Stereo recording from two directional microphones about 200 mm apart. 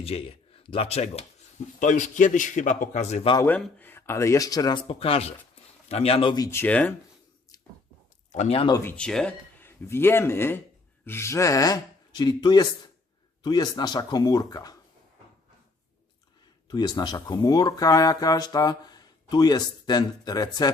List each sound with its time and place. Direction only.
0.0 s speech: 30° left (ahead or behind)
3.3 s speech: 10° left (ahead or behind)
8.3 s speech: 35° left (ahead or behind)
8.8 s speech: 5° left (ahead or behind)
16.6 s speech: 20° left (ahead or behind)